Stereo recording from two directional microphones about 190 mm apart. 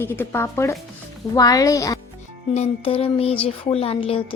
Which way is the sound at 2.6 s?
30° left (ahead or behind).